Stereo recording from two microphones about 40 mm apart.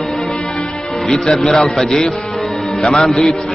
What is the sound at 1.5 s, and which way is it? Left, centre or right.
A man's voice, centre.